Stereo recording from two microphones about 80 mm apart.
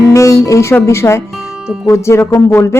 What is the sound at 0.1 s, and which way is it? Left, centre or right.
A woman's voice, left.